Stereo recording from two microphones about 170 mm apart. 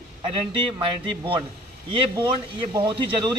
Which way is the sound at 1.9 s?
30° right (ahead or behind).